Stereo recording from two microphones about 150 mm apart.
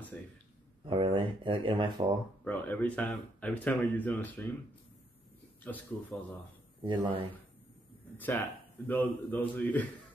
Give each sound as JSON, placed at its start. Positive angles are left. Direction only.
{"t": 0.8, "sound": "speech", "side_deg": -35}
{"t": 2.4, "sound": "speech", "side_deg": 10}
{"t": 5.6, "sound": "speech", "side_deg": 10}
{"t": 6.8, "sound": "speech", "side_deg": -30}
{"t": 8.2, "sound": "speech", "side_deg": 10}